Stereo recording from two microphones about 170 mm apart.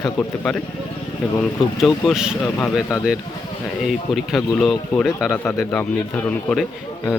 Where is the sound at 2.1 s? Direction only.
5° right (ahead or behind).